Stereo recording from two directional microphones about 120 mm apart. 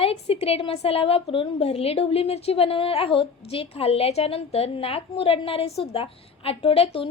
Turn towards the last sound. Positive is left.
turn(degrees=50)  # may be behind; listen again after turning